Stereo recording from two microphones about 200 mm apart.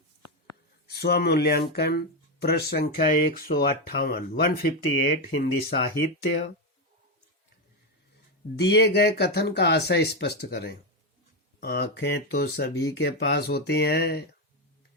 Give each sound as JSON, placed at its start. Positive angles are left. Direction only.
{"t": 0.9, "sound": "speech", "side_deg": 55}
{"t": 8.5, "sound": "speech", "side_deg": 55}